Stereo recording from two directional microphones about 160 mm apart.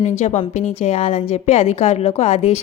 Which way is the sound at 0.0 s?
45° left (ahead or behind).